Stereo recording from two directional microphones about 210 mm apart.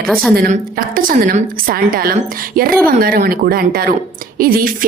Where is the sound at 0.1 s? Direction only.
5° left (ahead or behind).